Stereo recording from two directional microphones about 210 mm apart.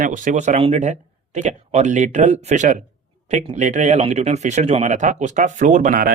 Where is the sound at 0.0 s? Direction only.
35° right (ahead or behind).